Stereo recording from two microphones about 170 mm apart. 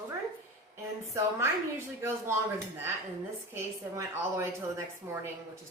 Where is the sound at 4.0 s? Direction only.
20° right (ahead or behind).